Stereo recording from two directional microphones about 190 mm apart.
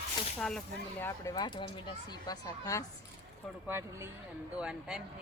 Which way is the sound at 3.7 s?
15° right (ahead or behind).